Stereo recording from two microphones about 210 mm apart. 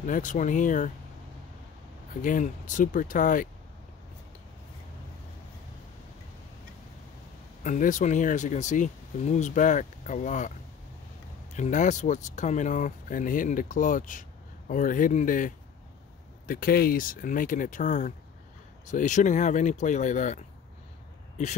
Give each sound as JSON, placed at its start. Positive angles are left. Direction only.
{"t": 0.0, "sound": "speech", "side_deg": 40}
{"t": 2.2, "sound": "speech", "side_deg": 40}
{"t": 7.6, "sound": "speech", "side_deg": 35}
{"t": 11.5, "sound": "speech", "side_deg": 35}